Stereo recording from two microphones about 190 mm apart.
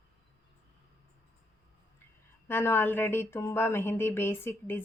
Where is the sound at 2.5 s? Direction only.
10° left (ahead or behind).